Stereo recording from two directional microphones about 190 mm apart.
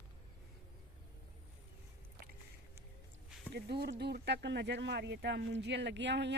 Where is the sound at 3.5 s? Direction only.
60° right (ahead or behind).